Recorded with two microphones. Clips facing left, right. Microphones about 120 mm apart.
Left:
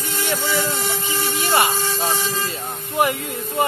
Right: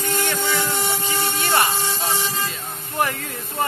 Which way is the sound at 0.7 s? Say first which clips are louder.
Right 1 dB; 25° right (ahead or behind).